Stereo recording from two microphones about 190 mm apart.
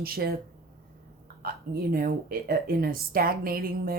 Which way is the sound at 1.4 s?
50° right (ahead or behind).